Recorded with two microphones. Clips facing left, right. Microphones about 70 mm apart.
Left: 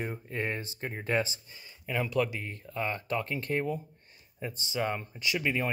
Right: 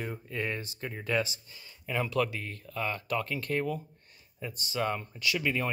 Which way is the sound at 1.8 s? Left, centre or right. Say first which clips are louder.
Even; centre.